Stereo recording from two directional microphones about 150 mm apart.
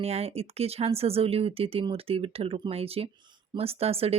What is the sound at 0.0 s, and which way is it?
Speech, 45° right (ahead or behind).